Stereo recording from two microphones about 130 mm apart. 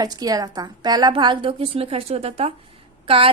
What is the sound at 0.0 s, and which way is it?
A woman's voice, 30° right (ahead or behind).